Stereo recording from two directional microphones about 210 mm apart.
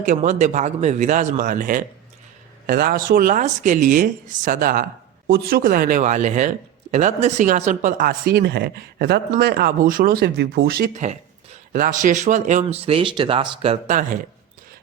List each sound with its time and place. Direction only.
0.0 s speech: 35° right (ahead or behind)